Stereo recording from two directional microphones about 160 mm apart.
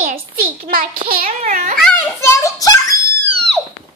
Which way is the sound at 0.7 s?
65° right (ahead or behind).